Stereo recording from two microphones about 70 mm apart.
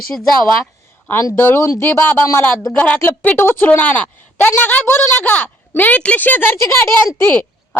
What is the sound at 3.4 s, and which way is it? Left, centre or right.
Speech, left.